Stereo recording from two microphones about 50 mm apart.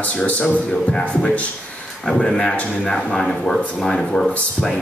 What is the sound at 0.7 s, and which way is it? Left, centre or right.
Speech, centre.